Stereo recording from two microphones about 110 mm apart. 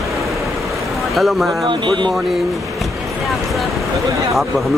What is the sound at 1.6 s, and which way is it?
Speech, 45° right (ahead or behind).